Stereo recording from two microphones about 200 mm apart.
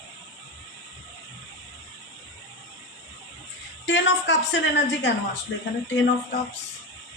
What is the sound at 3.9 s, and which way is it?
Speech, 65° left (ahead or behind).